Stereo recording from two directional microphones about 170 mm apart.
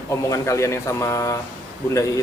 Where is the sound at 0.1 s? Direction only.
15° left (ahead or behind).